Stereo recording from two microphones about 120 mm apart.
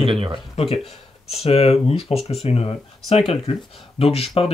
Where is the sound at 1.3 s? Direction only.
55° left (ahead or behind).